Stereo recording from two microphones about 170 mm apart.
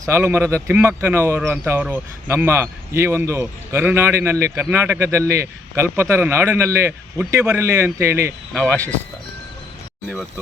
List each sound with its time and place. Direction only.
0.0 s speech: 15° right (ahead or behind)
8.5 s speech: 10° left (ahead or behind)